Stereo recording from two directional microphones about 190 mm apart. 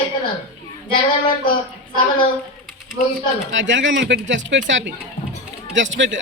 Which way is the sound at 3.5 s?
75° right (ahead or behind).